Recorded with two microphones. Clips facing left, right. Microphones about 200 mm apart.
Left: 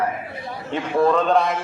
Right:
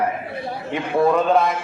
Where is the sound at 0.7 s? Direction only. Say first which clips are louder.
Even; 10° right (ahead or behind).